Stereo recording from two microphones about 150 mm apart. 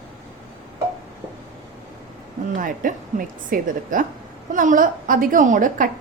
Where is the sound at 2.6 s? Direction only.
65° right (ahead or behind).